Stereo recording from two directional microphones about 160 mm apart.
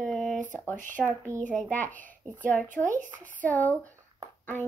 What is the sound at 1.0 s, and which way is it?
Speech, 20° right (ahead or behind).